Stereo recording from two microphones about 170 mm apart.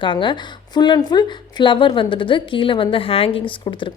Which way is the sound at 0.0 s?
30° left (ahead or behind).